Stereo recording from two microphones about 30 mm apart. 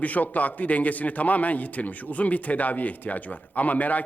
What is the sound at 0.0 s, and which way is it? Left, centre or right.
A man's voice, left.